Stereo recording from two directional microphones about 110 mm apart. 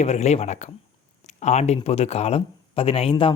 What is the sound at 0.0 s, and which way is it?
Speech, 90° left.